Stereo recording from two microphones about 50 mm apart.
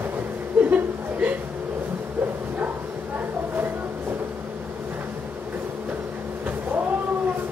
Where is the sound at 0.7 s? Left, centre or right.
Right.